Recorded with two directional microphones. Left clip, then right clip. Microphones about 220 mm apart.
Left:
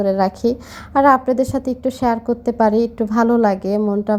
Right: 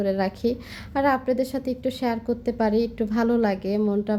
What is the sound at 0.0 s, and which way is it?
A woman's voice, 15° left (ahead or behind).